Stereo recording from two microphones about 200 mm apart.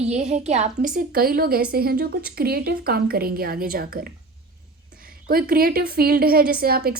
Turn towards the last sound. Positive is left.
turn(degrees=-50)  # may be behind; listen again after turning